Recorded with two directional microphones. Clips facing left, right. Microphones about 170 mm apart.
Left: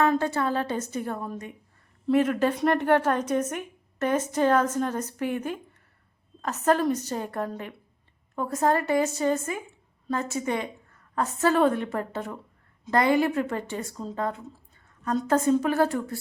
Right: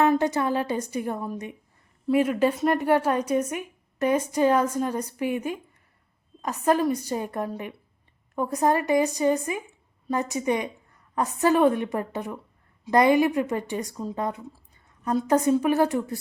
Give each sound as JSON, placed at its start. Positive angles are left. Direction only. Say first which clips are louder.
{"t": 0.0, "sound": "a woman's voice", "louder": "right 2 dB", "side_deg": -15}